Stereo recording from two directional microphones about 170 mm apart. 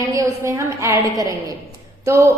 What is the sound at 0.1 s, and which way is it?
Speech, 20° right (ahead or behind).